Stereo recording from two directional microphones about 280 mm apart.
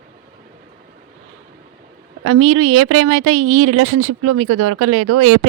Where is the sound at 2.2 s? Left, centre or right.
Right.